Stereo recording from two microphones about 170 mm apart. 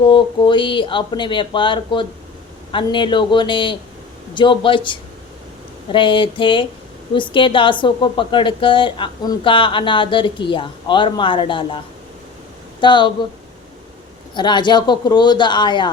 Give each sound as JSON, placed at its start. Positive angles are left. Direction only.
{"t": 0.0, "sound": "a woman's voice", "side_deg": 30}
{"t": 12.8, "sound": "speech", "side_deg": 30}
{"t": 14.3, "sound": "a woman's voice", "side_deg": 25}